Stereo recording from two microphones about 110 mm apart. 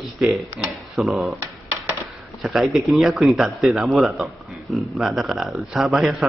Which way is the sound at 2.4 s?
Centre (ahead or behind).